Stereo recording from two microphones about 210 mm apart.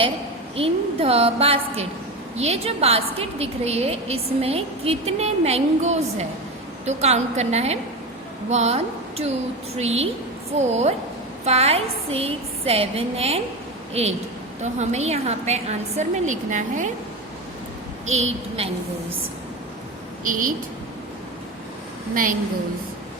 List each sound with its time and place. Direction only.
0.5 s a woman's voice: 25° right (ahead or behind)
18.1 s a woman's voice: 30° right (ahead or behind)
22.1 s a woman's voice: 40° right (ahead or behind)